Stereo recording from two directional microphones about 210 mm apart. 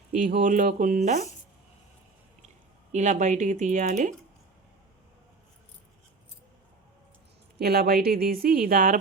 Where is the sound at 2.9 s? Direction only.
35° right (ahead or behind).